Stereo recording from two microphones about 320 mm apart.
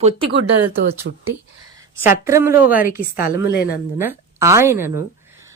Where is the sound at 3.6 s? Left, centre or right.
Centre.